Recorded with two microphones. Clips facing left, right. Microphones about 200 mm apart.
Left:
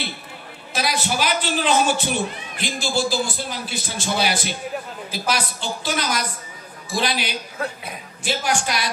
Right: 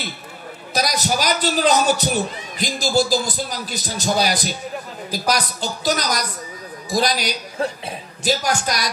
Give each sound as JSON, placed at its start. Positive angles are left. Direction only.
{"t": 0.7, "sound": "a man's voice", "side_deg": -40}